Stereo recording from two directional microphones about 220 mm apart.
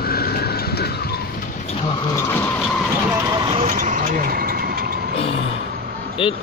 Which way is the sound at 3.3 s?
25° right (ahead or behind).